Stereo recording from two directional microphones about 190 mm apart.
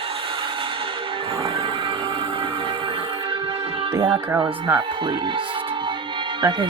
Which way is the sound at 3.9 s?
15° right (ahead or behind).